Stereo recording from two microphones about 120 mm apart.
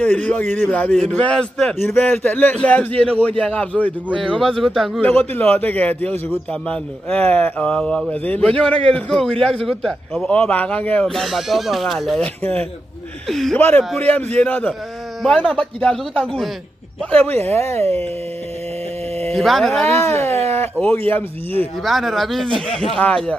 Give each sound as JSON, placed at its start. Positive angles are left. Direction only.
{"t": 0.0, "sound": "a man's voice", "side_deg": 10}
{"t": 5.0, "sound": "a man's voice", "side_deg": 15}
{"t": 13.3, "sound": "a man's voice", "side_deg": 0}
{"t": 13.6, "sound": "a man's voice", "side_deg": 15}
{"t": 17.5, "sound": "speech", "side_deg": 25}
{"t": 19.3, "sound": "a man's voice", "side_deg": 0}
{"t": 20.0, "sound": "speech", "side_deg": 25}
{"t": 21.8, "sound": "a man's voice", "side_deg": 0}